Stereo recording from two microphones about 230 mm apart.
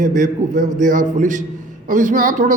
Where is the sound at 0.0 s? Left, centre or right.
Right.